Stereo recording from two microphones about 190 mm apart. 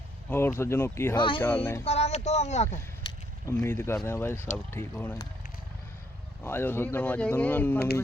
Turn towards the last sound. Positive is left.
turn(degrees=10)  # may be behind; listen again after turning